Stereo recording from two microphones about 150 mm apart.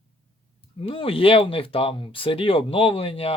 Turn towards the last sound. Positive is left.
turn(degrees=40)  # may be behind; listen again after turning